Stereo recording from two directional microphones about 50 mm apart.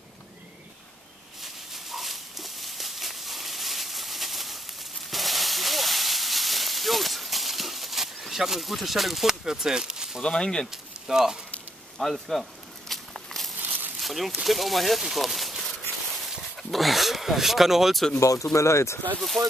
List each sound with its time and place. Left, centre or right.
1.4 s a sound: centre
5.1 s hiss: centre
10.2 s speech: centre
10.7 s speech: centre
12.0 s a sound: centre
13.6 s a sound: right
14.0 s speech: centre
16.7 s speech: centre
18.2 s speech: left
19.1 s speech: centre